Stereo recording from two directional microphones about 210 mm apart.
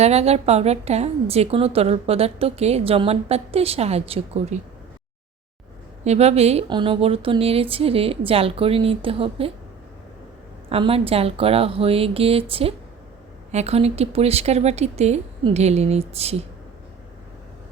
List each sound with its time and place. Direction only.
0.0 s a woman's voice: 30° right (ahead or behind)
6.1 s a woman's voice: 30° right (ahead or behind)
10.7 s a woman's voice: 25° right (ahead or behind)